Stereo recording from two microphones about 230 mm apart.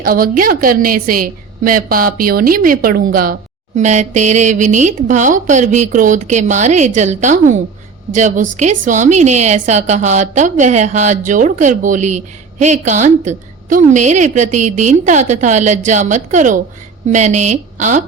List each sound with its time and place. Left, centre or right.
0.0 s a woman's voice: right